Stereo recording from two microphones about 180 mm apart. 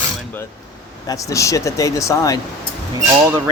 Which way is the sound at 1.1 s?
20° left (ahead or behind).